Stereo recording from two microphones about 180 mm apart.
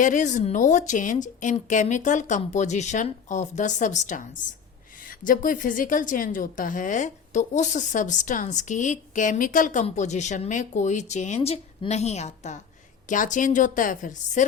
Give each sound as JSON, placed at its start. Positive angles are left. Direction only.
{"t": 0.0, "sound": "a woman's voice", "side_deg": 45}